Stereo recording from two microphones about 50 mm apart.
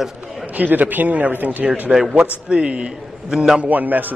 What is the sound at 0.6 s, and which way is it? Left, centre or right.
A man's voice, right.